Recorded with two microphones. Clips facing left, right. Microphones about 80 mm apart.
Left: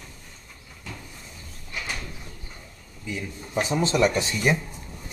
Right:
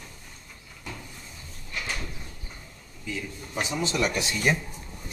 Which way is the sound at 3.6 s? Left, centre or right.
Left.